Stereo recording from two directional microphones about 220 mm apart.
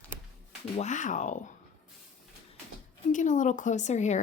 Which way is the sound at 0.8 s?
35° left (ahead or behind).